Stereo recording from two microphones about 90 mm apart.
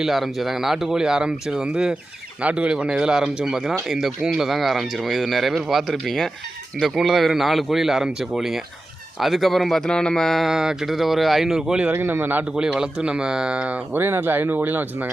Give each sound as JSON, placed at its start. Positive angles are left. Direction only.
{"t": 0.0, "sound": "speech", "side_deg": 0}
{"t": 11.9, "sound": "a man's voice", "side_deg": -25}
{"t": 12.5, "sound": "speech", "side_deg": -10}